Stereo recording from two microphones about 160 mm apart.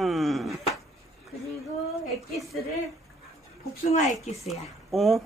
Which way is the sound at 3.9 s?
45° left (ahead or behind).